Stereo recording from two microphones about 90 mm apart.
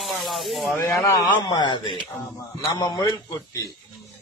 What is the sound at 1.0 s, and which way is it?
Speech, 35° left (ahead or behind).